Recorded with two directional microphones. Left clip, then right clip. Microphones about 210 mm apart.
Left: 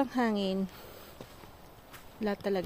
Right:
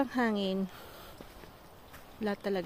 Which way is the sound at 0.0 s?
5° left (ahead or behind).